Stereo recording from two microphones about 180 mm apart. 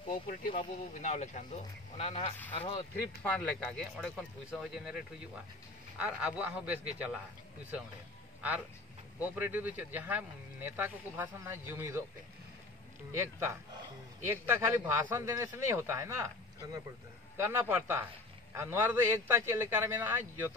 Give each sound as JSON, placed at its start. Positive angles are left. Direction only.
{"t": 0.1, "sound": "speech", "side_deg": 50}
{"t": 3.2, "sound": "speech", "side_deg": 5}
{"t": 8.4, "sound": "speech", "side_deg": -10}
{"t": 13.1, "sound": "speech", "side_deg": -15}
{"t": 17.4, "sound": "speech", "side_deg": -10}